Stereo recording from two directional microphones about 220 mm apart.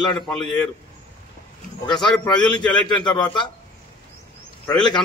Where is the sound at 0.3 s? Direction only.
Centre (ahead or behind).